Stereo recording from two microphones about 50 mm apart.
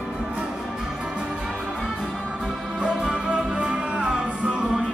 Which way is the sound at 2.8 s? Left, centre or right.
Centre.